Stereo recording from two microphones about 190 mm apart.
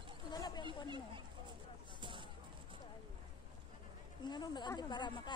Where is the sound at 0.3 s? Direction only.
20° left (ahead or behind).